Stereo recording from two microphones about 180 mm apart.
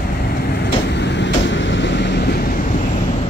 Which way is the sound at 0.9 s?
75° left (ahead or behind).